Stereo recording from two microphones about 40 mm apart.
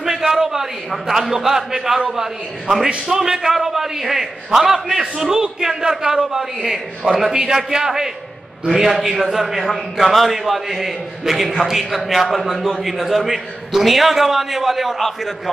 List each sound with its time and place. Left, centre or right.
0.0 s a man's voice: centre